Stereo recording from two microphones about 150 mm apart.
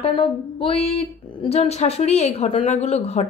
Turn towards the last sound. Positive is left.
turn(degrees=45)  # may be behind; listen again after turning